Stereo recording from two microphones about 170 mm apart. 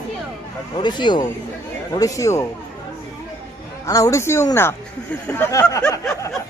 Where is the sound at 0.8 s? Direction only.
25° left (ahead or behind).